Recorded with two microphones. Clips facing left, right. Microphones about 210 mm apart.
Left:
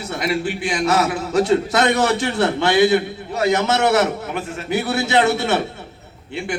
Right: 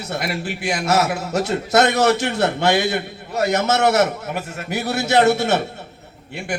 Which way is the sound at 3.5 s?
45° right (ahead or behind).